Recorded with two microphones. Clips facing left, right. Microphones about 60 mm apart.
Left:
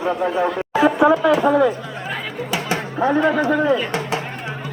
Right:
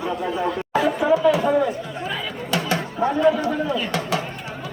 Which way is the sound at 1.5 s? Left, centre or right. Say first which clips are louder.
Left 4 dB; left.